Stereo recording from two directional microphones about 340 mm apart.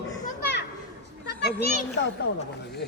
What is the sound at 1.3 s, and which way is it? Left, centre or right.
Children playing, left.